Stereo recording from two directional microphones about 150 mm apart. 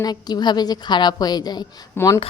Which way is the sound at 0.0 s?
25° left (ahead or behind).